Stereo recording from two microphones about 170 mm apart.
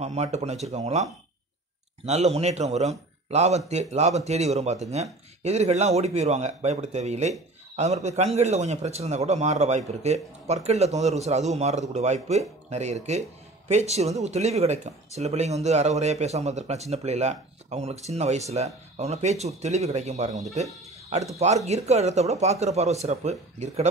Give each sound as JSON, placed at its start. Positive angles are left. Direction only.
{"t": 0.0, "sound": "speech", "side_deg": -40}
{"t": 2.0, "sound": "speech", "side_deg": -40}
{"t": 21.6, "sound": "speech", "side_deg": -40}